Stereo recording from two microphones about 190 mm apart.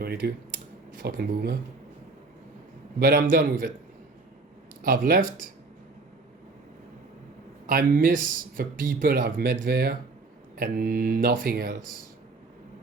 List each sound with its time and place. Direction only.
0.0 s speech: 50° right (ahead or behind)
3.0 s speech: 50° right (ahead or behind)
4.8 s speech: 45° right (ahead or behind)
7.7 s speech: 50° right (ahead or behind)